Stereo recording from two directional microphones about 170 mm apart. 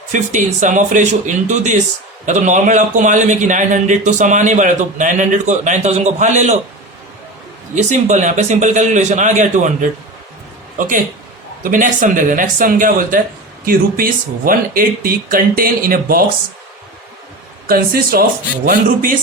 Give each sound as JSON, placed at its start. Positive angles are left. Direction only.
{"t": 0.1, "sound": "a man's voice", "side_deg": -50}
{"t": 7.8, "sound": "a man's voice", "side_deg": -45}
{"t": 17.7, "sound": "speech", "side_deg": -60}